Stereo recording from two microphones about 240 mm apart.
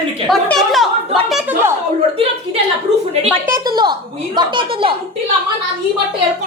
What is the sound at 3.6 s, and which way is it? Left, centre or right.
A woman's voice, centre.